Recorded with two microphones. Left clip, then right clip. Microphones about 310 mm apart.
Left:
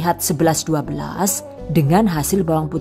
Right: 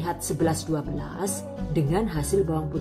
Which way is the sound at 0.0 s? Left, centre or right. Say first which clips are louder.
Left 9 dB; left.